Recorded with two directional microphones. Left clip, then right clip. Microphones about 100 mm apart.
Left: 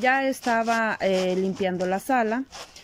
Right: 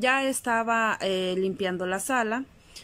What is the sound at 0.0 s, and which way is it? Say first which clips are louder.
Speech: left 2 dB; 10° right (ahead or behind).